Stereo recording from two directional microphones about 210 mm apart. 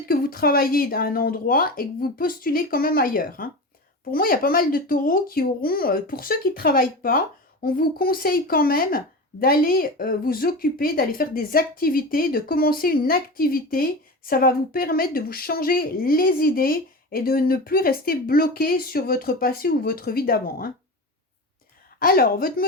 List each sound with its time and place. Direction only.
0.0 s a woman's voice: 45° left (ahead or behind)
21.9 s a woman's voice: 45° left (ahead or behind)